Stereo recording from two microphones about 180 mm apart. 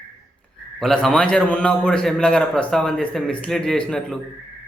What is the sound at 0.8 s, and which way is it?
A man's voice, centre (ahead or behind).